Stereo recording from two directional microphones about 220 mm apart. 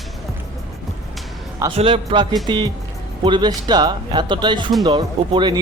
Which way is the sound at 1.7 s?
25° right (ahead or behind).